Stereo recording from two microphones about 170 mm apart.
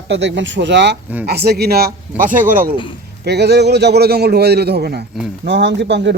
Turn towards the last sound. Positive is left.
turn(degrees=-90)